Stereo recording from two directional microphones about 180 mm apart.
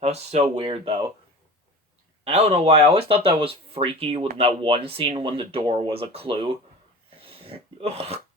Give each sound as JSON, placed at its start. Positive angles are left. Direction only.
{"t": 0.0, "sound": "speech", "side_deg": -35}
{"t": 2.2, "sound": "speech", "side_deg": -35}
{"t": 7.2, "sound": "a sound", "side_deg": -30}